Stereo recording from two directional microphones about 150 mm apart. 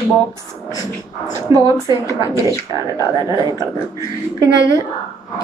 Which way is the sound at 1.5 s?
25° right (ahead or behind).